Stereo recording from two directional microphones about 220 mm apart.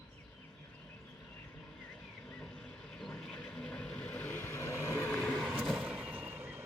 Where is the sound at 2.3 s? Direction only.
Centre (ahead or behind).